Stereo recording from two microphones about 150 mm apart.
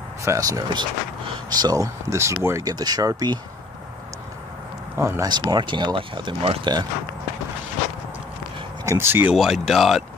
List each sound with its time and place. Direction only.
0.2 s speech: 20° right (ahead or behind)
4.9 s speech: 15° right (ahead or behind)
8.8 s speech: 15° right (ahead or behind)
9.3 s speech: centre (ahead or behind)